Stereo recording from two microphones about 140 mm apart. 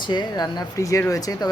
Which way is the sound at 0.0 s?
30° left (ahead or behind).